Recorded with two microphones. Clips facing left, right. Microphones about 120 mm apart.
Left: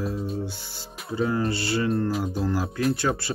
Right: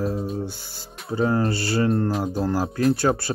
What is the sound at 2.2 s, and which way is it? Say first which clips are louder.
Music: right 3 dB; 40° right (ahead or behind).